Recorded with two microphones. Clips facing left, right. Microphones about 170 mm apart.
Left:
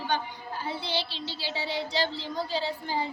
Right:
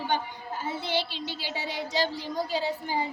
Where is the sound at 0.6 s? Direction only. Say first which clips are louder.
Right 2 dB; 45° right (ahead or behind).